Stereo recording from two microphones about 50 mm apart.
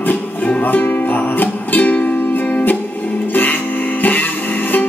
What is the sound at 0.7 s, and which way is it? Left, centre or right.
Music, left.